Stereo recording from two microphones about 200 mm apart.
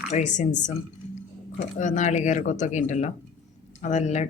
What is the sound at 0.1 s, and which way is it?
Speech, 35° left (ahead or behind).